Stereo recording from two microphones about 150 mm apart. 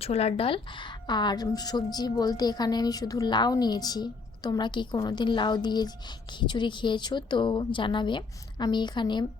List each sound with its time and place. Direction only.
0.0 s a woman's voice: 45° left (ahead or behind)